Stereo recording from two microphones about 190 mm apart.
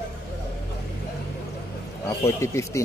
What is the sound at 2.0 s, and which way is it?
Speech, 15° left (ahead or behind).